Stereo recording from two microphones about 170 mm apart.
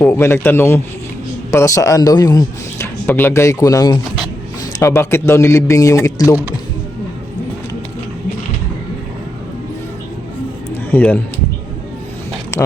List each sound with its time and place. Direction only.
0.0 s a man's voice: 15° left (ahead or behind)
10.9 s a man's voice: 10° left (ahead or behind)
12.5 s a sound: 15° left (ahead or behind)